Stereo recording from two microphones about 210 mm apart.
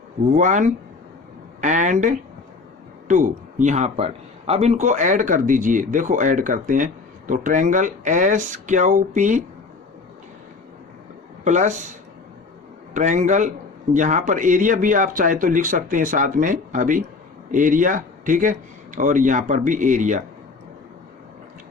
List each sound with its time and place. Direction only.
0.3 s a man's voice: 35° right (ahead or behind)
11.4 s a man's voice: 35° right (ahead or behind)
12.9 s a man's voice: 35° right (ahead or behind)